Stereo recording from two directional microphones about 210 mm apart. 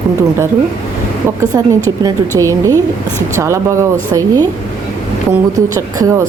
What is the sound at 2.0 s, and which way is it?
Speech, 15° right (ahead or behind).